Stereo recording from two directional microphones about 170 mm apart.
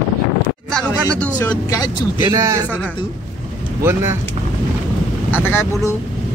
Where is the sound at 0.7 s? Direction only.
5° left (ahead or behind).